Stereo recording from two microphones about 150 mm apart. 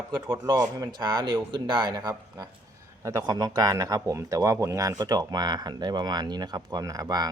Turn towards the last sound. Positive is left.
turn(degrees=-25)  # may be behind; listen again after turning